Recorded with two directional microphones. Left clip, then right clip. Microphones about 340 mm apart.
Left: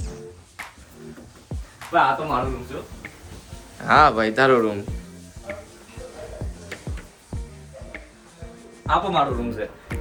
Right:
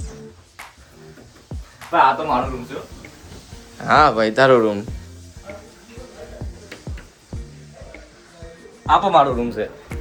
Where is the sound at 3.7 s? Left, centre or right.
Centre.